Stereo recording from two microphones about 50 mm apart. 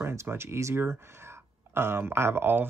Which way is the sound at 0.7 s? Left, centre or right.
Right.